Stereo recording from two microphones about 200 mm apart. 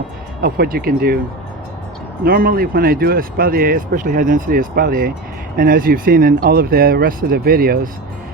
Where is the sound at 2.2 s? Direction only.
45° right (ahead or behind).